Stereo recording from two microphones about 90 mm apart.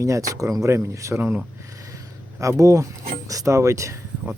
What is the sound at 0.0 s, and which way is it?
Speech, 35° right (ahead or behind).